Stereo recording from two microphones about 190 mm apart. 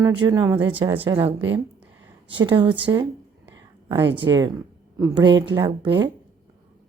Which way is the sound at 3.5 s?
20° right (ahead or behind).